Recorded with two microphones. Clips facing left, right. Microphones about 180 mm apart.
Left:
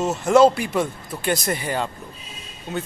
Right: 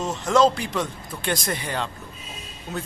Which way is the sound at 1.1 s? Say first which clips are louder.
Left 3 dB; 5° left (ahead or behind).